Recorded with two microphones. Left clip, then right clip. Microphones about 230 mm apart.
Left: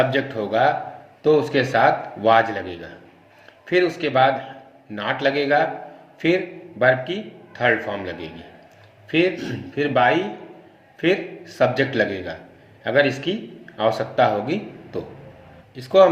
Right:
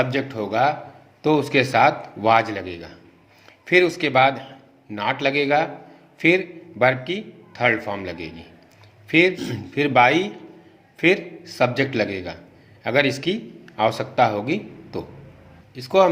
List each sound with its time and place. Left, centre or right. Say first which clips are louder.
0.0 s a man's voice: left 3 dB; right